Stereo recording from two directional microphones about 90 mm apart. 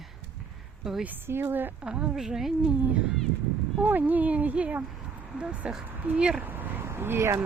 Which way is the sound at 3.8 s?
20° right (ahead or behind).